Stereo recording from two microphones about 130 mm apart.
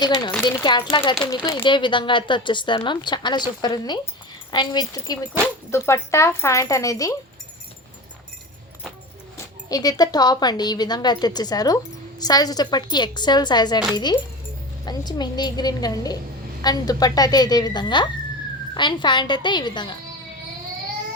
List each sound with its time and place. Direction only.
0.0 s a woman's voice: 35° left (ahead or behind)
5.7 s speech: 20° left (ahead or behind)
9.6 s a woman's voice: 30° left (ahead or behind)